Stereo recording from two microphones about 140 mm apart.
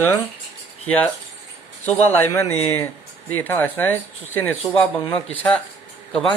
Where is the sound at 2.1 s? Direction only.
15° left (ahead or behind).